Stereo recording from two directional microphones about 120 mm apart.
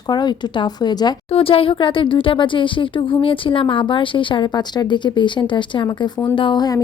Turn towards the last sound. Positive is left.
turn(degrees=35)  # may be behind; listen again after turning